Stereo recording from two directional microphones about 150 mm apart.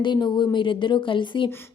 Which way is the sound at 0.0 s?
30° left (ahead or behind).